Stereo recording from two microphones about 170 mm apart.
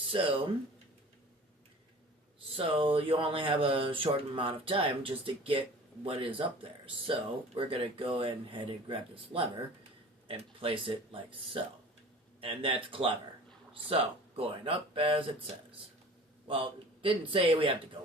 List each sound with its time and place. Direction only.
0.0 s speech: 30° right (ahead or behind)
2.6 s speech: 30° right (ahead or behind)
14.3 s speech: 30° right (ahead or behind)
16.5 s speech: 30° right (ahead or behind)